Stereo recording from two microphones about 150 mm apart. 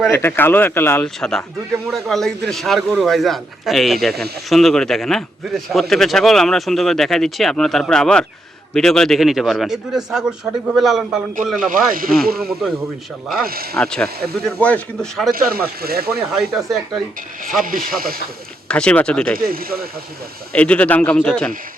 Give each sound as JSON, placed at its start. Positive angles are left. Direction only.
{"t": 0.1, "sound": "speech", "side_deg": 15}
{"t": 1.0, "sound": "a man's voice", "side_deg": 5}
{"t": 13.4, "sound": "speech", "side_deg": -85}
{"t": 13.7, "sound": "a man's voice", "side_deg": 5}
{"t": 15.3, "sound": "speech", "side_deg": -80}
{"t": 15.8, "sound": "speech", "side_deg": -90}
{"t": 16.3, "sound": "a man's voice", "side_deg": 0}
{"t": 17.6, "sound": "speech", "side_deg": -70}
{"t": 18.7, "sound": "speech", "side_deg": 5}
{"t": 19.4, "sound": "speech", "side_deg": -80}
{"t": 20.5, "sound": "speech", "side_deg": 10}